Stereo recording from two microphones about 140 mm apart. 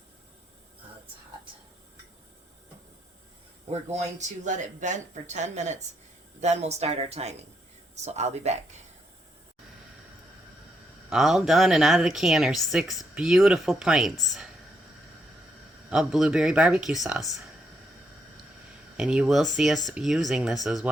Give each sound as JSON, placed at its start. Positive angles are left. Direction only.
{"t": 3.7, "sound": "speech", "side_deg": -55}
{"t": 11.1, "sound": "speech", "side_deg": 0}
{"t": 15.9, "sound": "speech", "side_deg": -5}
{"t": 18.9, "sound": "speech", "side_deg": -5}